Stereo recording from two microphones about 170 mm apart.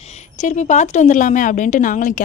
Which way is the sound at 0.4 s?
45° left (ahead or behind).